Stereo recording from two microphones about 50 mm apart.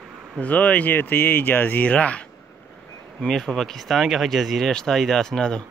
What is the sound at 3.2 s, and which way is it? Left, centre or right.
Speech, centre.